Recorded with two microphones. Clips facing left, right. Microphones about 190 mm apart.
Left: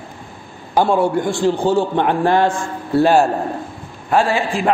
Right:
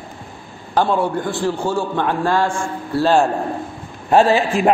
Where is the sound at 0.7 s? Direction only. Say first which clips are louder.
Left 2 dB; 10° left (ahead or behind).